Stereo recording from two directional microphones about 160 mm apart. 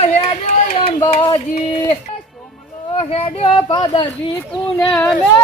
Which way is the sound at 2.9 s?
40° left (ahead or behind).